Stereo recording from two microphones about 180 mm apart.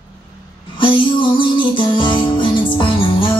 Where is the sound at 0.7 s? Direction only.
30° left (ahead or behind).